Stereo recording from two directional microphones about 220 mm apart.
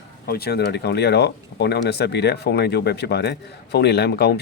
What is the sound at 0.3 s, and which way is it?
Speech, 45° left (ahead or behind).